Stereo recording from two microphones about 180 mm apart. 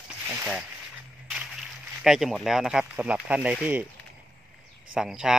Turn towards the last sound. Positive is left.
turn(degrees=-5)  # may be behind; listen again after turning